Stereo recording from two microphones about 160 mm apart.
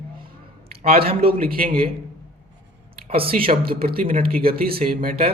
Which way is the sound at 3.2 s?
35° right (ahead or behind).